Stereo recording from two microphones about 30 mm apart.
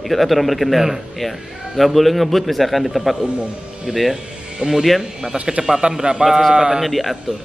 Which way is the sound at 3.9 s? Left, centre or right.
Centre.